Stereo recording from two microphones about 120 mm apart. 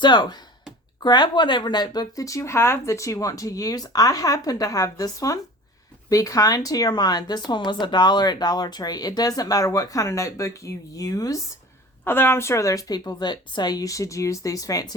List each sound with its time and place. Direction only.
0.0 s speech: 40° left (ahead or behind)
12.0 s speech: 20° left (ahead or behind)